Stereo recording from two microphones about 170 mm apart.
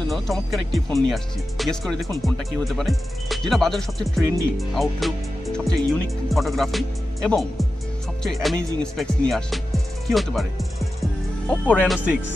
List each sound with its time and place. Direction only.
0.1 s speech: centre (ahead or behind)
10.0 s music: centre (ahead or behind)